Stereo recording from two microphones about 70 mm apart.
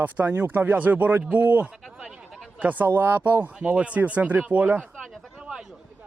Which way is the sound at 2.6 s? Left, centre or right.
Right.